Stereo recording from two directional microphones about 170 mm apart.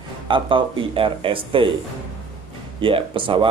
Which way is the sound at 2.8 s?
30° right (ahead or behind).